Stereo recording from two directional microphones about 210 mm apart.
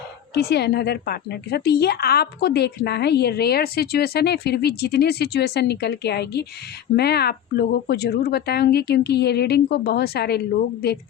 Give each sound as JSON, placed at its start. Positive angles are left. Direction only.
{"t": 0.3, "sound": "a woman's voice", "side_deg": 50}